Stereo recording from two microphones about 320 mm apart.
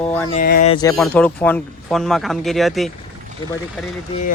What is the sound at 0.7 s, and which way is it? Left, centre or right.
Speech, centre.